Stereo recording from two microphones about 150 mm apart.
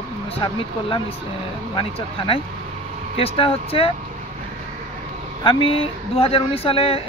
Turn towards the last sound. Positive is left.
turn(degrees=40)  # may be behind; listen again after turning